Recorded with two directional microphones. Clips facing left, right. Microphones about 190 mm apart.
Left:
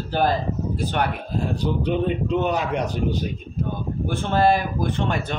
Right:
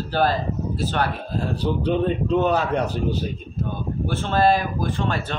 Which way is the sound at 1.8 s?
10° left (ahead or behind).